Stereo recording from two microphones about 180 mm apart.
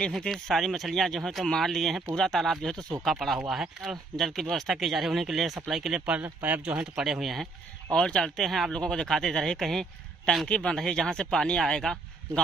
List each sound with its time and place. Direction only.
0.0 s speech: centre (ahead or behind)